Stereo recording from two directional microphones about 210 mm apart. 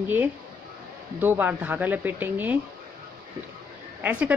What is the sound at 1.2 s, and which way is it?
A woman's voice, 10° right (ahead or behind).